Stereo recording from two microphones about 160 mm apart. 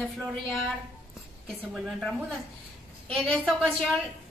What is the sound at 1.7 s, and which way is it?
A woman's voice, centre (ahead or behind).